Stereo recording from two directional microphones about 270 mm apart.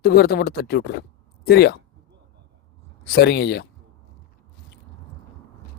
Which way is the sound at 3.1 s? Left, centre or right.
Left.